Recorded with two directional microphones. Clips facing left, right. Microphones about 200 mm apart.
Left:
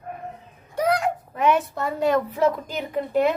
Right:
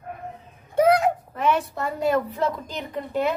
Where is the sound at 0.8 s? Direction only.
25° right (ahead or behind).